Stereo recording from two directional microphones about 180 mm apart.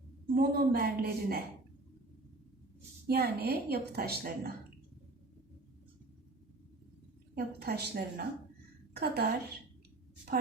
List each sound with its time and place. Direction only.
0.3 s a woman's voice: 60° right (ahead or behind)
3.1 s a woman's voice: 60° right (ahead or behind)
7.3 s a woman's voice: 60° right (ahead or behind)